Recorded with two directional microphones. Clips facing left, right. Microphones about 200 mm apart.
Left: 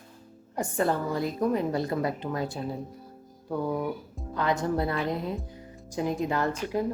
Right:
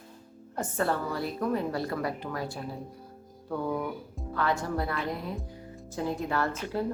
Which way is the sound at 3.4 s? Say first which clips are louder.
Left 2 dB; 10° left (ahead or behind).